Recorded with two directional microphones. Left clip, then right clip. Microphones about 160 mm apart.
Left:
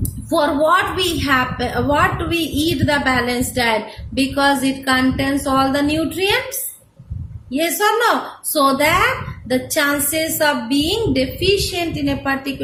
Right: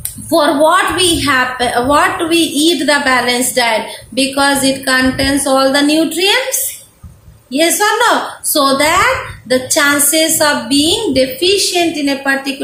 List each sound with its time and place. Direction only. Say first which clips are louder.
0.3 s a woman's voice: right 5 dB; 55° left (ahead or behind)
7.5 s a woman's voice: right 5 dB; 55° left (ahead or behind)